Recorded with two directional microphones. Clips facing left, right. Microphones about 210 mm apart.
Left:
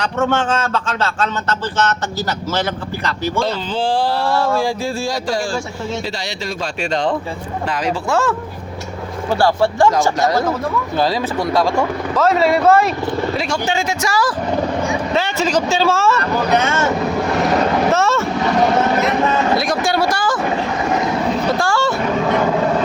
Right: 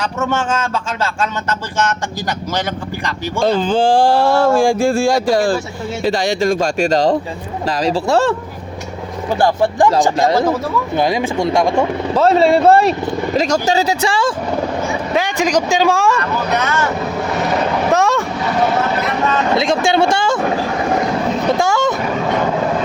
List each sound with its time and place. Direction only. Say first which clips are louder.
0.0 s speech: left 1 dB; 10° right (ahead or behind)
3.4 s a man's voice: right 11 dB; 50° right (ahead or behind); by 8.4 s 35° right (ahead or behind)
9.4 s speech: right 1 dB; 15° right (ahead or behind)
13.3 s a man's voice: right 5 dB; 40° right (ahead or behind)
15.1 s speech: right 3 dB; 15° right (ahead or behind)
16.6 s speech: left 1 dB; 25° left (ahead or behind)
17.4 s vehicle: left 1 dB; centre (ahead or behind)
17.9 s vehicle: right 2 dB; 15° right (ahead or behind)
19.5 s speech: right 3 dB; 25° right (ahead or behind)
21.6 s speech: right 2 dB; 20° right (ahead or behind)